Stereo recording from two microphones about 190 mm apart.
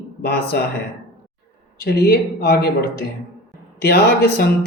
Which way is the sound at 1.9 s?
55° left (ahead or behind).